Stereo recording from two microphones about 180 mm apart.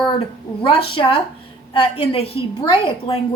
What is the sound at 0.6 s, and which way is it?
A woman's voice, 30° left (ahead or behind).